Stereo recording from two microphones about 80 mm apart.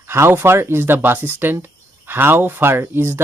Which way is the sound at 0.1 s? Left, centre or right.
Right.